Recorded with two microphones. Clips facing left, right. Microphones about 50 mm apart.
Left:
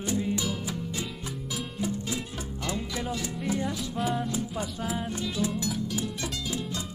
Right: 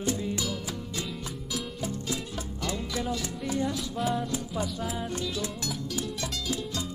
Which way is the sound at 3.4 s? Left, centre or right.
Left.